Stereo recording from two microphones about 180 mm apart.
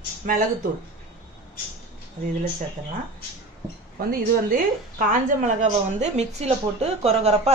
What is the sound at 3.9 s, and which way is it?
A woman's voice, 50° right (ahead or behind).